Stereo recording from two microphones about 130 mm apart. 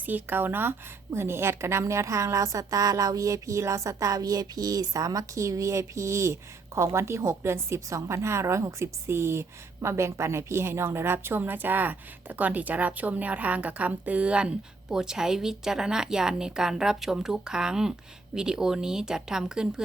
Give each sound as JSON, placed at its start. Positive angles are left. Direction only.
{"t": 0.0, "sound": "a woman's voice", "side_deg": -15}